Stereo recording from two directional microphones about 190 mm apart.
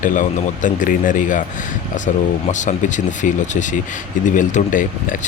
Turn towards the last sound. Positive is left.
turn(degrees=45)  # may be behind; listen again after turning